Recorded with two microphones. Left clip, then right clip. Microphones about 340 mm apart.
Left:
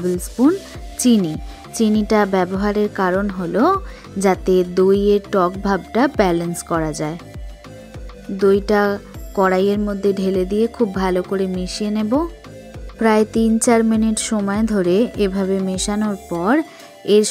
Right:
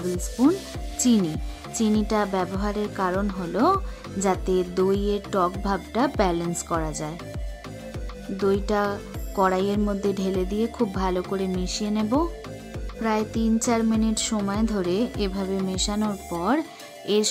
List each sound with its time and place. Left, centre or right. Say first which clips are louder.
0.4 s speech: left 5 dB; centre
8.4 s speech: left 8 dB; centre
16.0 s speech: left 5 dB; centre
16.3 s speech: left 7 dB; centre